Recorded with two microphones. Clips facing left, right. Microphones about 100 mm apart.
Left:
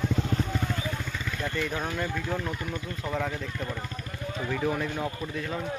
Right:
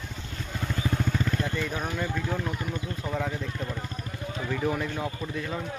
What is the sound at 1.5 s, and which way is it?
Speech, 15° right (ahead or behind).